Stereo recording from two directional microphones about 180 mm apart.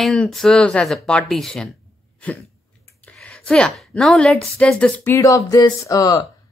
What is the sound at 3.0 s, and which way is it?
A woman's voice, 5° left (ahead or behind).